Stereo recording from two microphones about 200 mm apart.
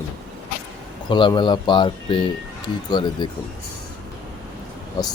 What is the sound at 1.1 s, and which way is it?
Speech, 25° left (ahead or behind).